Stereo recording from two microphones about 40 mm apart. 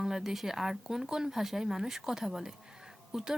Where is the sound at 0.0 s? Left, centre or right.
Centre.